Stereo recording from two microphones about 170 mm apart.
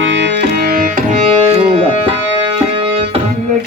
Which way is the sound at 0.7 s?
55° right (ahead or behind).